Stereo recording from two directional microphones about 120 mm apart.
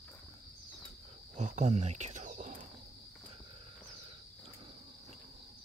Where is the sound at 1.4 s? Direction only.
70° right (ahead or behind); by 2.7 s 85° right.